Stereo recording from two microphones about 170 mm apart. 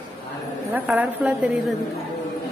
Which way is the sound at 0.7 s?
10° right (ahead or behind).